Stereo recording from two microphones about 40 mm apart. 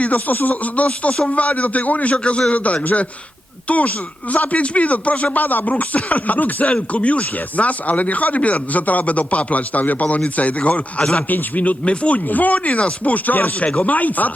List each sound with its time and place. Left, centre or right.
0.0 s speech: left
1.1 s speech: centre
1.4 s speech: left
11.3 s speech: left